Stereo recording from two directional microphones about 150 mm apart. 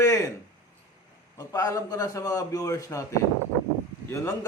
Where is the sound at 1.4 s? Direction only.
20° left (ahead or behind).